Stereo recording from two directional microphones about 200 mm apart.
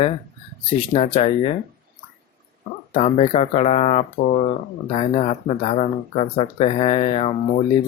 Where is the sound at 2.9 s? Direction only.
30° left (ahead or behind).